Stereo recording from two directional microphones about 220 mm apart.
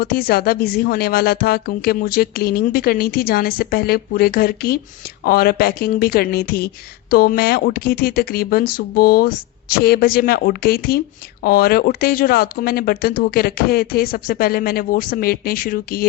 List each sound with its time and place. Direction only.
0.0 s a woman's voice: 40° left (ahead or behind)